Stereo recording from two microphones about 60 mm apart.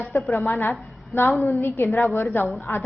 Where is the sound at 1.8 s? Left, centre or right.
Left.